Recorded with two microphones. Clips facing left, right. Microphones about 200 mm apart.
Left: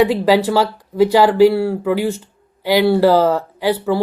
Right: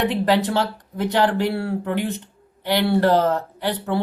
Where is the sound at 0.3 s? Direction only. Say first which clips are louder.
Left 5 dB; 90° left.